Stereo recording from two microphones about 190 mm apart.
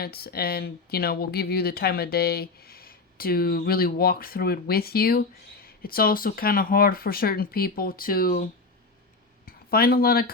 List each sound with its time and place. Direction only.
0.0 s speech: 55° left (ahead or behind)
9.5 s speech: 50° left (ahead or behind)